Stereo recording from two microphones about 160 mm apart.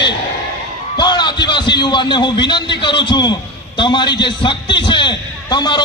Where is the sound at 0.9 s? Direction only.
30° left (ahead or behind).